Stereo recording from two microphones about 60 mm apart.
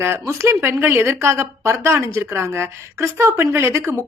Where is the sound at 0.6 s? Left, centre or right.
Right.